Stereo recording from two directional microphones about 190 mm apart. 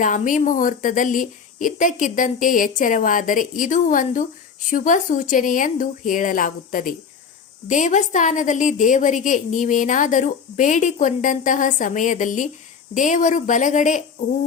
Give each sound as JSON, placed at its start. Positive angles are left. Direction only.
{"t": 0.0, "sound": "a woman's voice", "side_deg": 40}